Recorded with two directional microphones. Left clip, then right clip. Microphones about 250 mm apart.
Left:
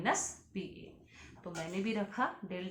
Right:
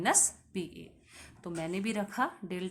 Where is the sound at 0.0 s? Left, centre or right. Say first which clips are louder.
Right 4 dB; right.